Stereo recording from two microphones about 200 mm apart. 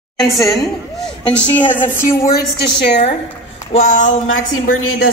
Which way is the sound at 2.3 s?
50° left (ahead or behind).